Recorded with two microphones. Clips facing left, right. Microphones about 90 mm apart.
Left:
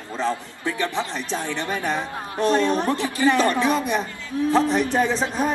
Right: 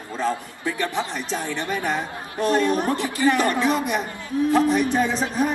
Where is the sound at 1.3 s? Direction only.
20° left (ahead or behind).